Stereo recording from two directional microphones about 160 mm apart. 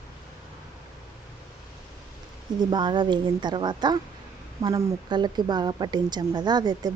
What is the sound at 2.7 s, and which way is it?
A woman's voice, 30° right (ahead or behind).